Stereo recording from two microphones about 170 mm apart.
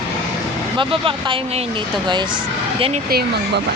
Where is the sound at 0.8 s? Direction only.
30° right (ahead or behind).